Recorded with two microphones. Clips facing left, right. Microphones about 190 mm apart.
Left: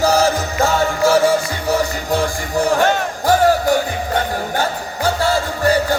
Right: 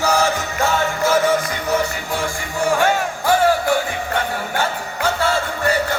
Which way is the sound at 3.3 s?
40° left (ahead or behind).